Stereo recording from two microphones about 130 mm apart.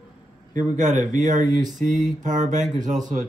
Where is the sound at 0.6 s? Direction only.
70° right (ahead or behind).